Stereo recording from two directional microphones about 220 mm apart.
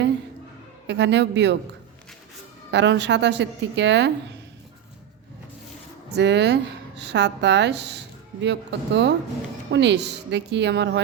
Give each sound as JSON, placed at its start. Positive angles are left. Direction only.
{"t": 0.9, "sound": "speech", "side_deg": -50}
{"t": 2.7, "sound": "speech", "side_deg": -55}
{"t": 6.1, "sound": "speech", "side_deg": -50}